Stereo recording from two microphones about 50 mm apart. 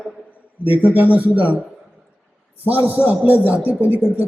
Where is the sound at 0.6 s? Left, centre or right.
Right.